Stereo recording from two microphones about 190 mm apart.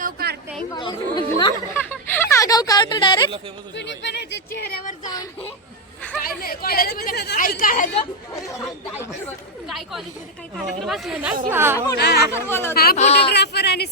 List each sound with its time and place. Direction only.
0.0 s a sound: 55° right (ahead or behind)
0.7 s speech: 25° left (ahead or behind)
1.9 s a sound: 10° left (ahead or behind)
3.8 s speech: 65° left (ahead or behind)
5.0 s speech: 20° left (ahead or behind)
6.2 s a woman's voice: 50° left (ahead or behind)
9.6 s a woman's voice: centre (ahead or behind)
11.9 s speech: 60° left (ahead or behind)
12.3 s speech: 10° left (ahead or behind)
12.7 s a woman's voice: 55° left (ahead or behind)
13.0 s speech: 35° left (ahead or behind)
13.3 s speech: 60° left (ahead or behind)